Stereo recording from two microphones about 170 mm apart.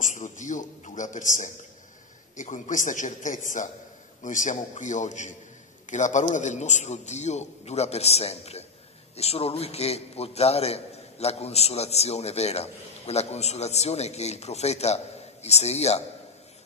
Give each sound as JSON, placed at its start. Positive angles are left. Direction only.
{"t": 0.0, "sound": "a man's voice", "side_deg": 45}